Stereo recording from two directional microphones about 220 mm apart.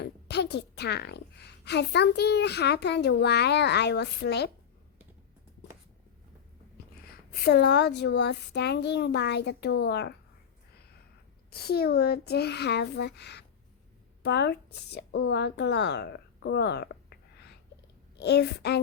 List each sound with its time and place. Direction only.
0.0 s a woman's voice: 50° left (ahead or behind)
7.3 s a woman's voice: 50° left (ahead or behind)
11.5 s a woman's voice: 45° left (ahead or behind)